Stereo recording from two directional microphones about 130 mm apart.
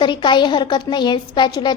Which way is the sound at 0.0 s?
35° left (ahead or behind).